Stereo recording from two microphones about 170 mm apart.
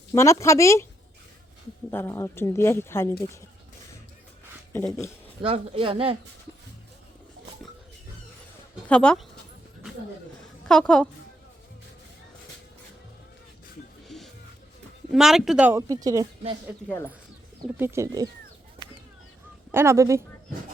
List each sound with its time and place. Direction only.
0.1 s speech: 15° left (ahead or behind)
1.9 s speech: 15° left (ahead or behind)
4.7 s speech: 15° left (ahead or behind)
5.4 s speech: 30° right (ahead or behind)
8.9 s speech: 5° left (ahead or behind)
10.7 s speech: 5° left (ahead or behind)
14.1 s music: centre (ahead or behind)
15.1 s speech: centre (ahead or behind)
15.7 s a woman's voice: 20° right (ahead or behind)
17.6 s speech: 15° right (ahead or behind)
19.7 s speech: 15° right (ahead or behind)